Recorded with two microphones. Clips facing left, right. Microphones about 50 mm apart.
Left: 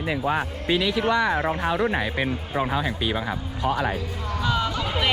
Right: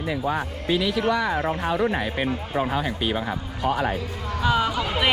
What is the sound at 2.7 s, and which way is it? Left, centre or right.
Speech, left.